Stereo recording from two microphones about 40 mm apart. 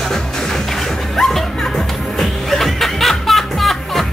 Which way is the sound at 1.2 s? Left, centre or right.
Centre.